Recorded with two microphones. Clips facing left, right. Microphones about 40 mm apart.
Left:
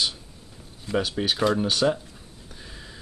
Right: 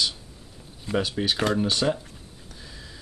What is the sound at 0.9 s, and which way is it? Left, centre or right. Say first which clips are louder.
Speech: even; centre.